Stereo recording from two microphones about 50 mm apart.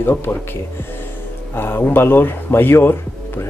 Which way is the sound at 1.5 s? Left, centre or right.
Left.